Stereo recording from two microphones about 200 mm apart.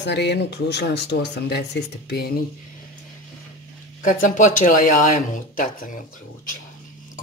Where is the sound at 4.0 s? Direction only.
40° left (ahead or behind).